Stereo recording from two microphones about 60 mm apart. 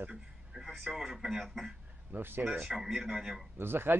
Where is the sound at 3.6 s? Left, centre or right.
Right.